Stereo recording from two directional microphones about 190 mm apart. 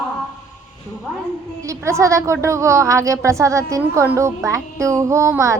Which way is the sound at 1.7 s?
15° right (ahead or behind).